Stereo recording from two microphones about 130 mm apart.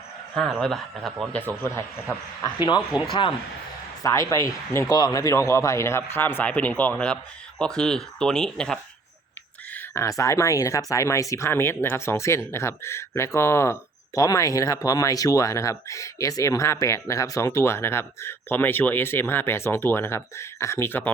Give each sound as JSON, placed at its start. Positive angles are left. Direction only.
{"t": 0.6, "sound": "speech", "side_deg": 0}
{"t": 2.9, "sound": "speech", "side_deg": 35}
{"t": 4.0, "sound": "speech", "side_deg": 25}
{"t": 9.7, "sound": "speech", "side_deg": 20}